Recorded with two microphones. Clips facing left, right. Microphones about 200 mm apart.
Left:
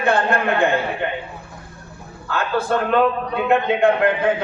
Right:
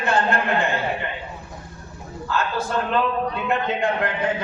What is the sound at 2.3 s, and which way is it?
A man's voice, 55° left (ahead or behind).